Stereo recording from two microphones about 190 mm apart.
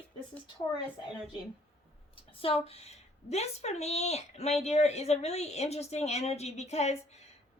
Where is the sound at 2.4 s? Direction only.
30° left (ahead or behind).